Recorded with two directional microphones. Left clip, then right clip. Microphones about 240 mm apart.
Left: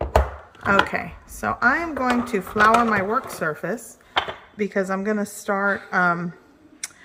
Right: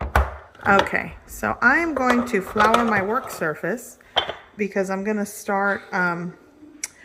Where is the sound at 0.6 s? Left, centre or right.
Centre.